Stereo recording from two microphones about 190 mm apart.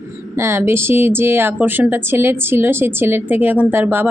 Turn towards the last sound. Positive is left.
turn(degrees=-10)  # may be behind; listen again after turning